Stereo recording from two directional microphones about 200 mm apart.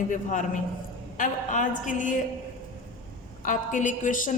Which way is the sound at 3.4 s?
40° left (ahead or behind).